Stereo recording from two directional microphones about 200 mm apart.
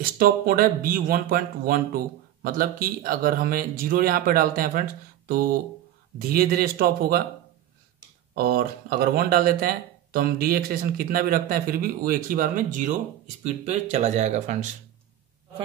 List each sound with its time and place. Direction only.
0.0 s speech: 45° right (ahead or behind)
6.1 s speech: 45° right (ahead or behind)
8.4 s speech: 50° right (ahead or behind)